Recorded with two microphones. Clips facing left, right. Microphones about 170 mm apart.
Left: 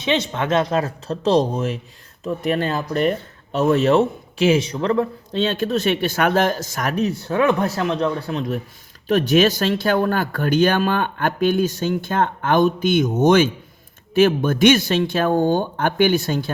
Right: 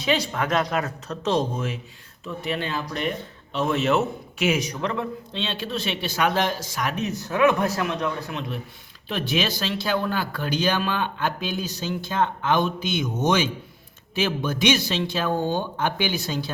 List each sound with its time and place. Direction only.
0.0 s speech: 25° left (ahead or behind)
9.0 s speech: 45° left (ahead or behind)